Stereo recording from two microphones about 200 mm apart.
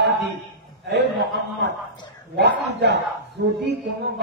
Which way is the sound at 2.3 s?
60° right (ahead or behind).